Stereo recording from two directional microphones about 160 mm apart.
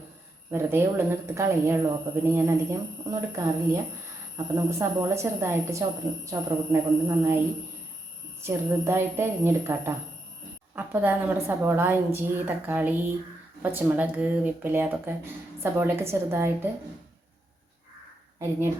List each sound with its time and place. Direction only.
0.5 s a woman's voice: 15° right (ahead or behind)